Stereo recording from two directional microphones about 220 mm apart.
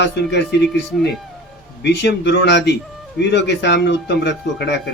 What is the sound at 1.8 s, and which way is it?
Speech, 50° left (ahead or behind).